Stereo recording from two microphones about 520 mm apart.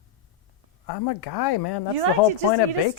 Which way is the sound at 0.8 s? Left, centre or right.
Left.